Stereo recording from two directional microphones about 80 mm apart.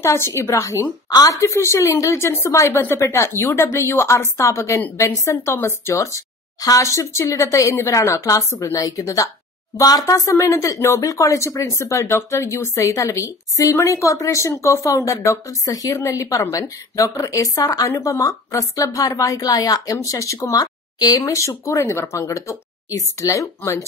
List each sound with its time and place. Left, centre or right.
0.0 s a woman's voice: left
21.2 s a woman's voice: left